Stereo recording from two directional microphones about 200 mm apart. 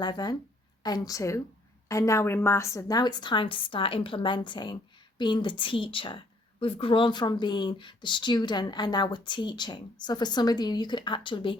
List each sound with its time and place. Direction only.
0.0 s a woman's voice: 20° left (ahead or behind)